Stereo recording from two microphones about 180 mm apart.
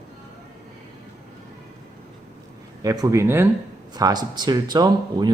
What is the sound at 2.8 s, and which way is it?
Speech, 20° right (ahead or behind).